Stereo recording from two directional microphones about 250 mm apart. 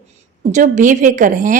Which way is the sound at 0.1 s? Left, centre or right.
Right.